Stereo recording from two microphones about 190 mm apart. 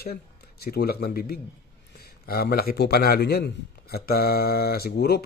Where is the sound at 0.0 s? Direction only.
55° left (ahead or behind).